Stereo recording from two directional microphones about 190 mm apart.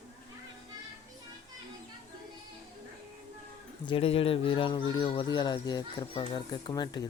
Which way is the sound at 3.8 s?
30° left (ahead or behind).